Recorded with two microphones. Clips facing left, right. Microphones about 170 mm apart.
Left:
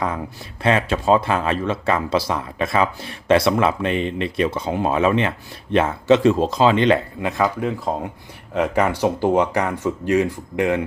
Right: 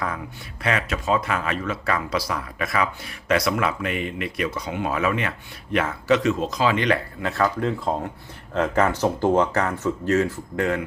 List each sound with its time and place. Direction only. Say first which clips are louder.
0.6 s speech: left 6 dB; 30° left (ahead or behind)